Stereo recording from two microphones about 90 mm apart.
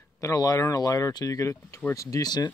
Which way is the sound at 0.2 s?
40° left (ahead or behind).